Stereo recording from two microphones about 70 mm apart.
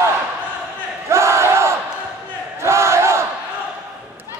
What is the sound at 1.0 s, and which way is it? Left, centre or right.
Battle cry, right.